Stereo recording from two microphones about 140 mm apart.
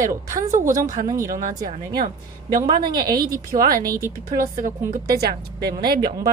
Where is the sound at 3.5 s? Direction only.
90° right.